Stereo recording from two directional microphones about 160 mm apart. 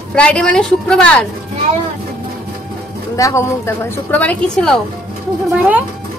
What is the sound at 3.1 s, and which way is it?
A woman's voice, 20° left (ahead or behind).